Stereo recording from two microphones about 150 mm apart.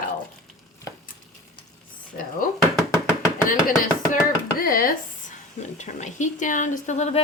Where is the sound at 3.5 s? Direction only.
65° left (ahead or behind).